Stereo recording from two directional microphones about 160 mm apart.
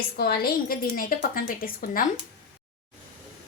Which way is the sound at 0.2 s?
75° left (ahead or behind).